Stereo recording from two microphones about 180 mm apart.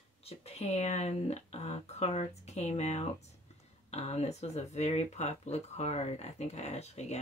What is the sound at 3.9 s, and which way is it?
Speech, 35° left (ahead or behind).